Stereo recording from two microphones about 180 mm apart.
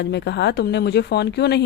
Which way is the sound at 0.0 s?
70° left (ahead or behind).